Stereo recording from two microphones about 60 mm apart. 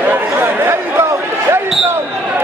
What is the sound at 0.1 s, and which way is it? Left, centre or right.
Chatter, right.